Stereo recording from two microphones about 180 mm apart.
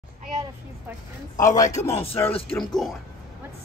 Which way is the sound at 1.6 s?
40° left (ahead or behind).